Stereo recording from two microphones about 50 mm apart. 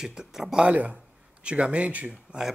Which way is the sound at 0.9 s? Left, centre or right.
Right.